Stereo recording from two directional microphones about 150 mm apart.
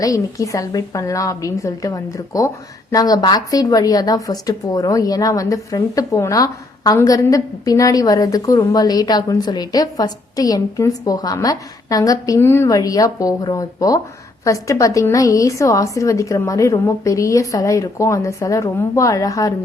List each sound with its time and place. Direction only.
0.0 s a woman's voice: 20° left (ahead or behind)